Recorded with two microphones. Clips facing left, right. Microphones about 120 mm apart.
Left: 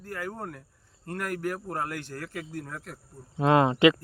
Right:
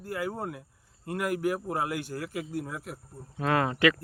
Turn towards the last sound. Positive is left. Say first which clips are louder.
# left 5 dB
turn(degrees=20)  # may be behind; listen again after turning